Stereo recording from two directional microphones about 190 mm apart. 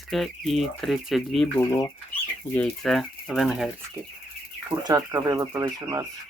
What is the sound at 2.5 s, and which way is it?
Speech, 5° left (ahead or behind).